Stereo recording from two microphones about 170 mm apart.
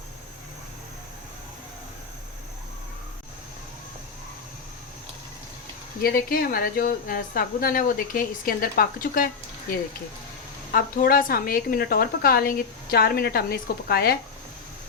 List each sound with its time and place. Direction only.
6.0 s a woman's voice: 60° left (ahead or behind)
10.7 s a woman's voice: 60° left (ahead or behind)